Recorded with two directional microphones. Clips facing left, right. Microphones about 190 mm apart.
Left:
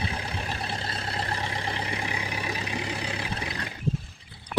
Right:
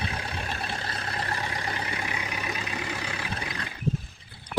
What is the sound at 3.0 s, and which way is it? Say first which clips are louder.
Vehicle: left 2 dB; 30° left (ahead or behind).